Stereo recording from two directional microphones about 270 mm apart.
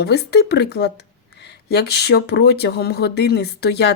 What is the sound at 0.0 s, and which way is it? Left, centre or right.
Speech, left.